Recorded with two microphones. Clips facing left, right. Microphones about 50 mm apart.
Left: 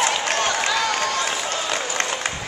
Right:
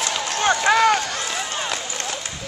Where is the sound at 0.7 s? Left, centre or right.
Right.